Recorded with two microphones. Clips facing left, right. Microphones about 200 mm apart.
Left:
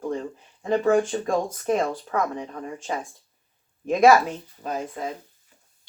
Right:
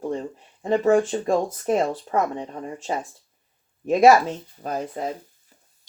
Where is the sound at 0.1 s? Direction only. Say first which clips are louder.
Right 1 dB; 30° right (ahead or behind).